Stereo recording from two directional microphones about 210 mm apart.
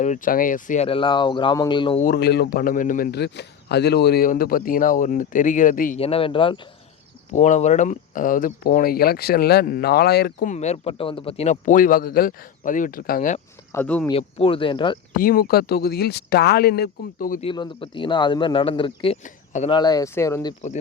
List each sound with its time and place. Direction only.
0.0 s speech: 40° left (ahead or behind)
2.0 s a man's voice: 50° left (ahead or behind)
6.0 s speech: 25° left (ahead or behind)
7.3 s a man's voice: 35° left (ahead or behind); by 10.5 s 50° left (ahead or behind)
10.5 s a man's voice: 30° left (ahead or behind)
13.7 s speech: 5° left (ahead or behind)
14.1 s speech: 25° left (ahead or behind)
15.1 s a man's voice: 45° left (ahead or behind)
17.4 s speech: 25° left (ahead or behind)
19.7 s speech: 20° left (ahead or behind)